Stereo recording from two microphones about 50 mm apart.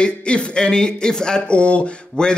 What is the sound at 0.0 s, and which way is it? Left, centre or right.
A man's voice, centre.